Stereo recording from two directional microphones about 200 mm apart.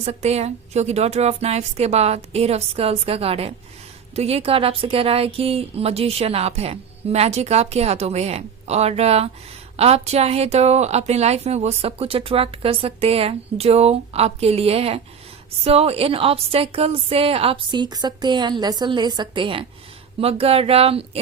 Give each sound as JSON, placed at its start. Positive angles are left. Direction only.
{"t": 0.0, "sound": "a woman's voice", "side_deg": -30}